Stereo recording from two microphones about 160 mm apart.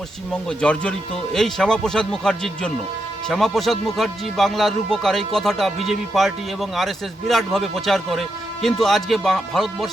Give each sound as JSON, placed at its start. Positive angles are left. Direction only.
{"t": 0.4, "sound": "speech", "side_deg": 5}